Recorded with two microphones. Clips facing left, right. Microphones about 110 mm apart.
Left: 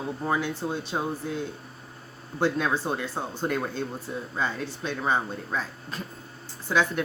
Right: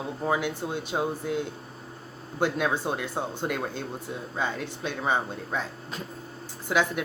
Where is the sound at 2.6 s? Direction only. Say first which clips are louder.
Even; 15° right (ahead or behind).